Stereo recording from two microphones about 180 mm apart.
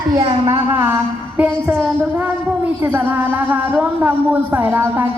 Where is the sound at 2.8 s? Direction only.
10° right (ahead or behind).